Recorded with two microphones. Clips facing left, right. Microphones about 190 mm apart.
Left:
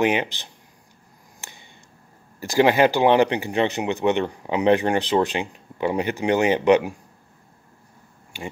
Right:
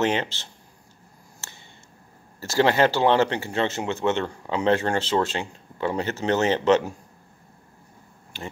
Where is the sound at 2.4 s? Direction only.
15° left (ahead or behind).